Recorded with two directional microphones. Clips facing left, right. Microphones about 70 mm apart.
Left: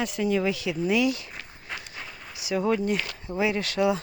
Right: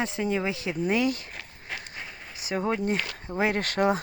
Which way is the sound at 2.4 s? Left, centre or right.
Right.